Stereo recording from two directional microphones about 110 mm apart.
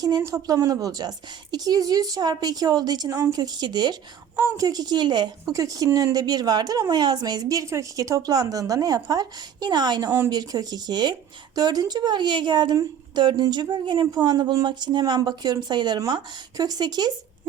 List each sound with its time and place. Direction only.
0.2 s speech: 30° right (ahead or behind)